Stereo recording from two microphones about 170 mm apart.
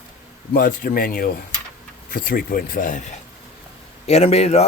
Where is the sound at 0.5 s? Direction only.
60° left (ahead or behind).